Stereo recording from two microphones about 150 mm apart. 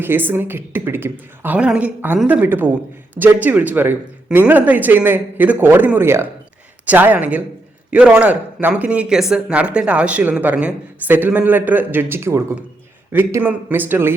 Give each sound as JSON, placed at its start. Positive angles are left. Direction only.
{"t": 0.0, "sound": "speech", "side_deg": -15}